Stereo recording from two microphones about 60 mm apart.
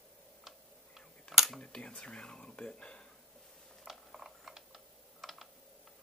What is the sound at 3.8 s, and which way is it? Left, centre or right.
Typing, centre.